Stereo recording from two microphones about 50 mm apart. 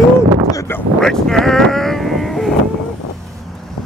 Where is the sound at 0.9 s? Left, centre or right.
Centre.